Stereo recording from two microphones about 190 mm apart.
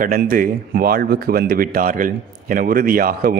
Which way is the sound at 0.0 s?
45° right (ahead or behind).